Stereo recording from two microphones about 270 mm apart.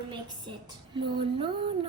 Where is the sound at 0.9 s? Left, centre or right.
Centre.